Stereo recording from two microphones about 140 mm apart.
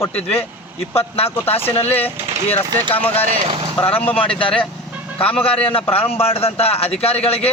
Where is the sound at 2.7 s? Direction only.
25° right (ahead or behind).